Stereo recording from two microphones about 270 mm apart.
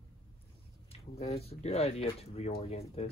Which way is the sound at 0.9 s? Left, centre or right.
Left.